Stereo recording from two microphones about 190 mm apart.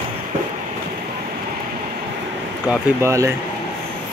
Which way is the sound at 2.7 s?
15° right (ahead or behind).